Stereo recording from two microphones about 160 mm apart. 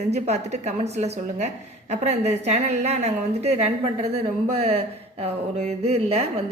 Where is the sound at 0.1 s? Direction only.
45° right (ahead or behind).